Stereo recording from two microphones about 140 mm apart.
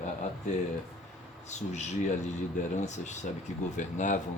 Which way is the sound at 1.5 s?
55° left (ahead or behind).